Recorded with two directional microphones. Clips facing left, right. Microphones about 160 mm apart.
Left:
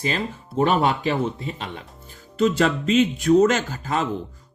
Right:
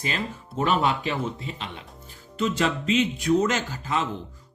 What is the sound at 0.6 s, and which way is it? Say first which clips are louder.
Speech: left 4 dB; 40° left (ahead or behind).